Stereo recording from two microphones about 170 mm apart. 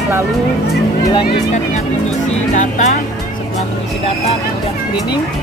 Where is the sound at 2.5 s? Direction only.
45° left (ahead or behind).